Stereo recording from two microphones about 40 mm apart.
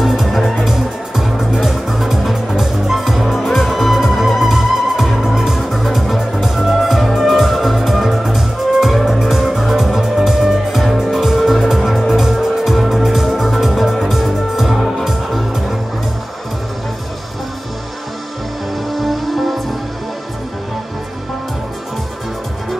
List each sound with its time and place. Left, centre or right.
0.0 s music: centre
18.9 s music: centre